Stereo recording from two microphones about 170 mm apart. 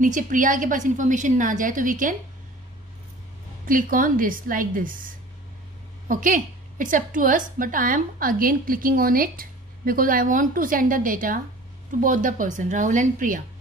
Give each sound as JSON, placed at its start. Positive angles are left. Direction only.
{"t": 0.0, "sound": "a woman's voice", "side_deg": -50}
{"t": 3.6, "sound": "a woman's voice", "side_deg": -55}